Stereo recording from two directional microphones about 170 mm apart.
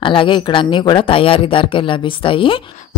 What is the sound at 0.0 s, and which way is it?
Speech, 30° left (ahead or behind).